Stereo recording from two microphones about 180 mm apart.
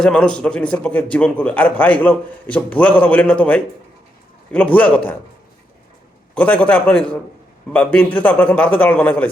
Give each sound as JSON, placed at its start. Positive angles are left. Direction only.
{"t": 0.0, "sound": "a man's voice", "side_deg": 5}
{"t": 6.3, "sound": "a man's voice", "side_deg": 5}